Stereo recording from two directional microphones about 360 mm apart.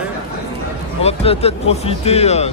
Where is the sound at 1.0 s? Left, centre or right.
Centre.